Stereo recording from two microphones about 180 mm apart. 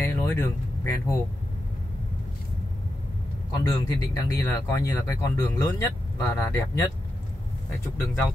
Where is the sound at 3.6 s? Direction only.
20° left (ahead or behind).